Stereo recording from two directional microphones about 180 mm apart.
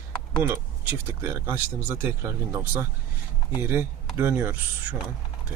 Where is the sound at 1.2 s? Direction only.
10° right (ahead or behind).